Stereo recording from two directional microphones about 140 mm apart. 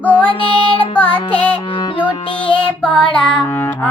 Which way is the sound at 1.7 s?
35° left (ahead or behind).